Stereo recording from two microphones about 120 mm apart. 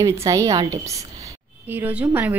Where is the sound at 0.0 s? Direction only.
25° right (ahead or behind).